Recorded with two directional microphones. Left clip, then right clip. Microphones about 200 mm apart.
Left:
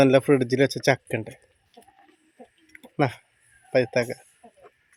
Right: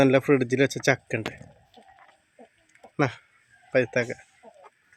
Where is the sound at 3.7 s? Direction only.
10° left (ahead or behind).